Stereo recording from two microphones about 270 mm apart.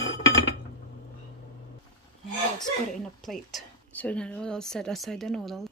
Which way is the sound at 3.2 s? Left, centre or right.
Centre.